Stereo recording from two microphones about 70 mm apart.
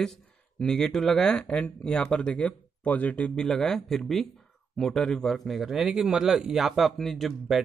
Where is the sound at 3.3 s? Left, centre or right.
Centre.